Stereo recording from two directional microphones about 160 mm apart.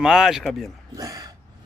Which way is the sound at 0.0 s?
5° right (ahead or behind).